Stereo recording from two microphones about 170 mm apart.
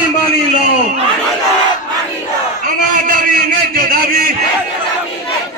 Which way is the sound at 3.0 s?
55° right (ahead or behind).